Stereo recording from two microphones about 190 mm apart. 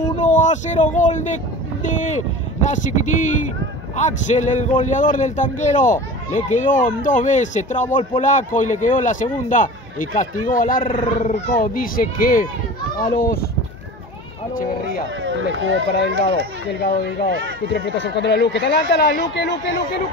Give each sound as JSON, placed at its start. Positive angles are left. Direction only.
{"t": 0.2, "sound": "a man's voice", "side_deg": 40}
{"t": 14.9, "sound": "speech", "side_deg": -75}
{"t": 16.8, "sound": "speech", "side_deg": 60}